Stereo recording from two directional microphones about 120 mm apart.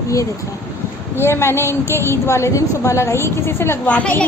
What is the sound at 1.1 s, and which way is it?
A woman's voice, 20° left (ahead or behind).